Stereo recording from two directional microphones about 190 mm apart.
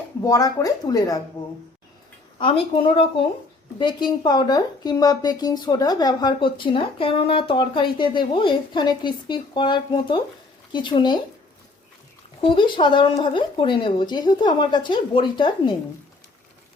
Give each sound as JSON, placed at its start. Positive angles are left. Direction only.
{"t": 0.3, "sound": "speech", "side_deg": 20}
{"t": 2.4, "sound": "speech", "side_deg": 30}
{"t": 12.4, "sound": "speech", "side_deg": 25}